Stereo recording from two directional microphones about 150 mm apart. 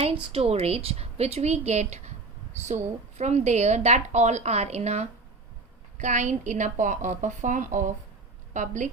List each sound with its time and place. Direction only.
0.0 s a woman's voice: 40° right (ahead or behind); by 8.9 s 55° right (ahead or behind)